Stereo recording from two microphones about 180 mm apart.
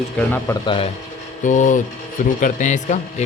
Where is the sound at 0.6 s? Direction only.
30° left (ahead or behind).